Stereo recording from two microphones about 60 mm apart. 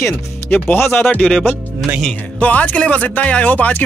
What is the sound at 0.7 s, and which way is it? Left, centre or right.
Speech, left.